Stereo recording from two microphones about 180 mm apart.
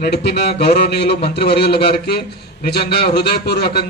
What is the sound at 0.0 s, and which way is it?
Speech, 65° left (ahead or behind).